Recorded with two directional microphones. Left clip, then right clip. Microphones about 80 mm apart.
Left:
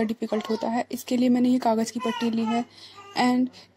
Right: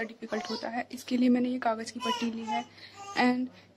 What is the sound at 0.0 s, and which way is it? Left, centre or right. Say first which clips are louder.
Speech: left 7 dB; left.